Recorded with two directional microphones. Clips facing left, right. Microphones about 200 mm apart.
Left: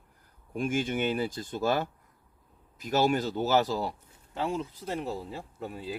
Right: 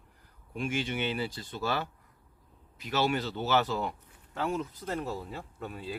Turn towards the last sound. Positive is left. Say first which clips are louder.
# left 2 dB
turn(degrees=25)  # may be behind; listen again after turning